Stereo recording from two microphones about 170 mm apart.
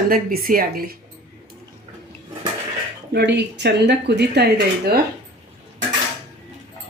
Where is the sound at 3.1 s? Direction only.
85° right.